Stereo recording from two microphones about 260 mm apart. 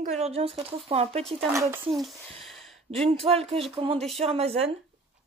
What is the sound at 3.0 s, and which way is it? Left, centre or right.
Speech, right.